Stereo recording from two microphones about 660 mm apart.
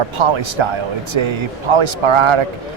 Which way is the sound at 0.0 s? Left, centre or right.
Right.